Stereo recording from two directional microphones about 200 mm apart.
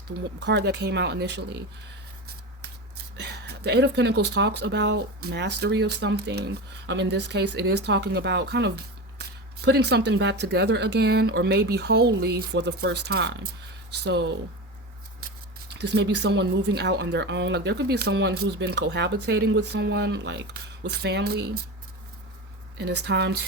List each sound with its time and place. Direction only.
0.3 s speech: 60° right (ahead or behind)
3.2 s speech: 55° right (ahead or behind)
15.7 s speech: 55° right (ahead or behind)
22.8 s speech: 55° right (ahead or behind)